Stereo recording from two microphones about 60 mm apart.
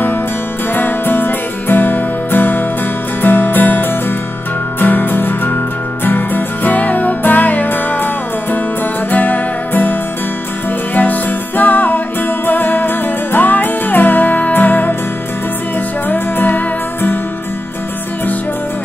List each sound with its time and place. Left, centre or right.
0.7 s music: left
11.0 s music: left
16.1 s music: left